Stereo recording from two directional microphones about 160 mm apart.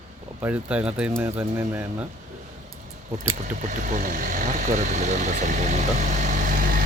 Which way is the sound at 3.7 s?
55° right (ahead or behind).